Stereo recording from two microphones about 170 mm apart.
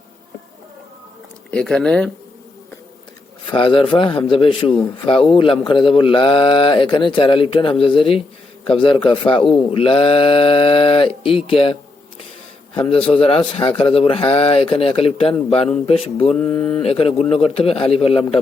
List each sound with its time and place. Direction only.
1.5 s speech: 5° left (ahead or behind)
3.5 s a man's voice: 30° left (ahead or behind)
12.9 s a man's voice: 35° left (ahead or behind)
16.3 s mantra: 10° left (ahead or behind)
16.8 s a man's voice: 35° left (ahead or behind)